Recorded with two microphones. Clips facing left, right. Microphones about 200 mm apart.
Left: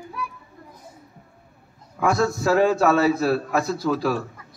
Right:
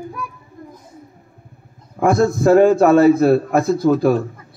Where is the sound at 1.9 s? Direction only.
50° right (ahead or behind).